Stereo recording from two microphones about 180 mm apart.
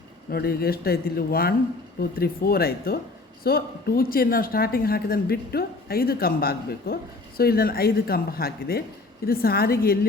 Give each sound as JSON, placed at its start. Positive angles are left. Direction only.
{"t": 0.3, "sound": "a woman's voice", "side_deg": 60}